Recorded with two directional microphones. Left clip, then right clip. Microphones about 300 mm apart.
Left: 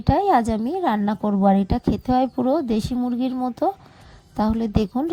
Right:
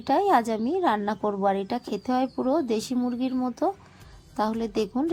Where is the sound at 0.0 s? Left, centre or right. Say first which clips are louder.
Left 3 dB; left.